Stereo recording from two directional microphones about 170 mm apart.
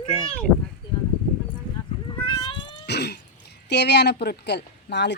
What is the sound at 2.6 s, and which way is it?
Speech, 75° left (ahead or behind).